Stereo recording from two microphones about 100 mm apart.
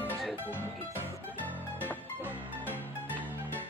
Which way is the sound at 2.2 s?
20° right (ahead or behind).